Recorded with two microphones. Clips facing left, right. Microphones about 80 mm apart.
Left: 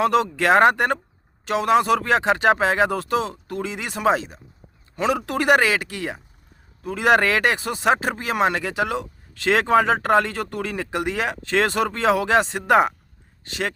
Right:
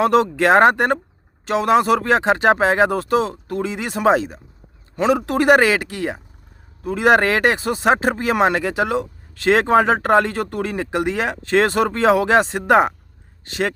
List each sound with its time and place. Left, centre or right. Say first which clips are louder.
0.0 s speech: right 4 dB; right